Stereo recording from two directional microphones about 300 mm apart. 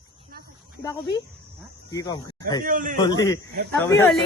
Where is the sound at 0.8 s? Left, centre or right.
Centre.